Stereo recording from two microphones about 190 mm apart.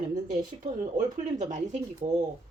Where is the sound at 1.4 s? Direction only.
40° right (ahead or behind).